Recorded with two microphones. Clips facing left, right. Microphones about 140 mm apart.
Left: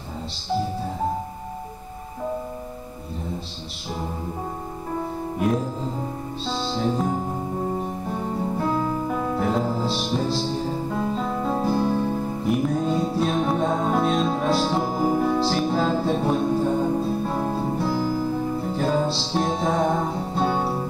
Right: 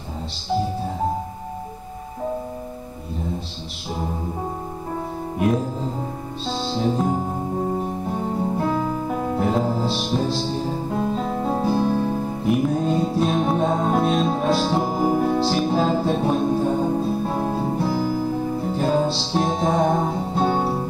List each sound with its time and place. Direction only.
5.4 s music: 10° right (ahead or behind)
6.5 s music: 25° right (ahead or behind); by 12.8 s 5° right (ahead or behind)
12.8 s music: 20° right (ahead or behind)
20.5 s music: 25° right (ahead or behind)